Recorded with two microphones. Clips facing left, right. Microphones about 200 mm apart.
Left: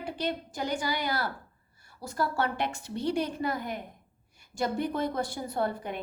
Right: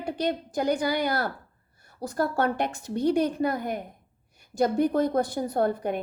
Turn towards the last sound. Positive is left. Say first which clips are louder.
# right 6 dB
turn(degrees=-50)  # may be behind; listen again after turning